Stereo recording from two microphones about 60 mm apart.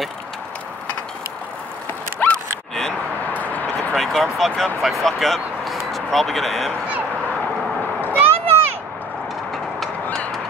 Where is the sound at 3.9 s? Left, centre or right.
Centre.